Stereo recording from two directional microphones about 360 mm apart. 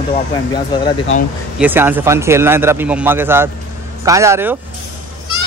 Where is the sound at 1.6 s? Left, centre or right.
Centre.